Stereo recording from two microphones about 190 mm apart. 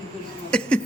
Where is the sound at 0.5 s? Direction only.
5° left (ahead or behind).